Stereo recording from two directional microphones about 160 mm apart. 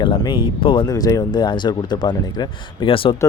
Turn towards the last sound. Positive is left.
turn(degrees=35)  # may be behind; listen again after turning